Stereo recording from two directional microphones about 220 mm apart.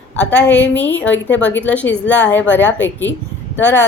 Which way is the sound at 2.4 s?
55° left (ahead or behind).